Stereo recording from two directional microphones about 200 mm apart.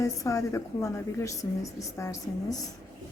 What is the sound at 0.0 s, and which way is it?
A woman's voice, 15° left (ahead or behind).